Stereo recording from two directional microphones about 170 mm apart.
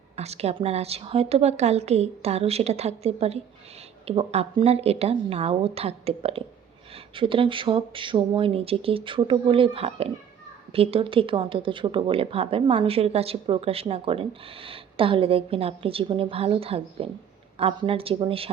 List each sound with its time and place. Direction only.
0.2 s speech: 40° right (ahead or behind)